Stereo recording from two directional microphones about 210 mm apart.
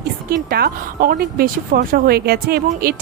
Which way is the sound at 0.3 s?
45° right (ahead or behind).